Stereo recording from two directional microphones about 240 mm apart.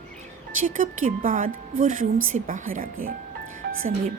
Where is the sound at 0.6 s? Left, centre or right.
Right.